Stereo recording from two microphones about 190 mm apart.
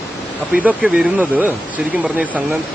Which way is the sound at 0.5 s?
5° right (ahead or behind).